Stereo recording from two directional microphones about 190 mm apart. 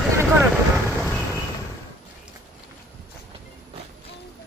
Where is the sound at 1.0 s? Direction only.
Centre (ahead or behind).